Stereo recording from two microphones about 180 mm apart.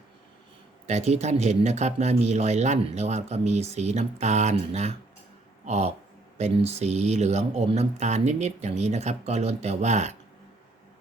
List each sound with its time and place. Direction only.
0.9 s speech: 40° right (ahead or behind)